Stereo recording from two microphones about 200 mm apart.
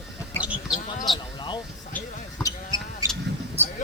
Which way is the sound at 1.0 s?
20° left (ahead or behind).